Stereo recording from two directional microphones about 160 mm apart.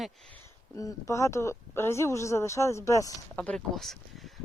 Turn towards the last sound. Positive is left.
turn(degrees=0)  # may be behind; listen again after turning